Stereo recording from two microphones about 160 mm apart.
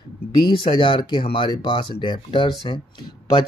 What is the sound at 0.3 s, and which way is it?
Speech, 30° left (ahead or behind).